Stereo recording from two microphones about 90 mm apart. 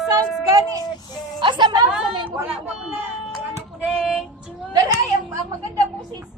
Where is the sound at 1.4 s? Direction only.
65° right (ahead or behind).